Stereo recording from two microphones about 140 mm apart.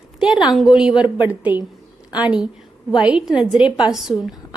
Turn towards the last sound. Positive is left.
turn(degrees=-5)  # may be behind; listen again after turning